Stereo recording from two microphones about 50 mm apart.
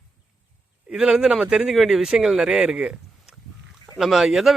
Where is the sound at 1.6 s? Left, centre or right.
Centre.